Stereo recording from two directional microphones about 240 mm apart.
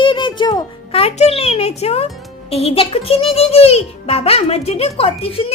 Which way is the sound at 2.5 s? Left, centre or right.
Left.